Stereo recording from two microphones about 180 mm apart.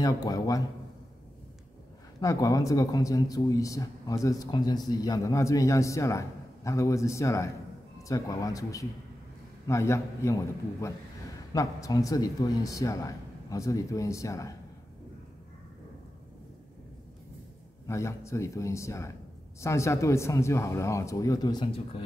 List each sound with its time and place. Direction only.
0.0 s speech: 20° left (ahead or behind)
2.1 s speech: 20° left (ahead or behind)
17.8 s speech: 15° left (ahead or behind)